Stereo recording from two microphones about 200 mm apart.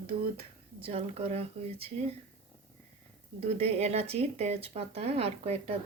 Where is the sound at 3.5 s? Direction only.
30° right (ahead or behind).